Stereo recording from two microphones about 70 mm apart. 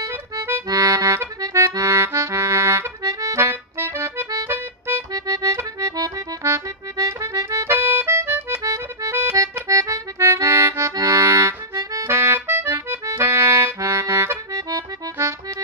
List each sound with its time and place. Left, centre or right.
0.7 s accordion: right
3.3 s accordion: right
5.1 s accordion: right
6.4 s accordion: right
7.6 s accordion: right
8.6 s accordion: right
9.1 s accordion: right
9.4 s accordion: right
12.1 s accordion: right
13.7 s music: right